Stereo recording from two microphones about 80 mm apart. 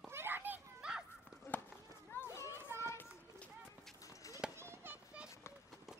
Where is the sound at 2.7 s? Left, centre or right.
Right.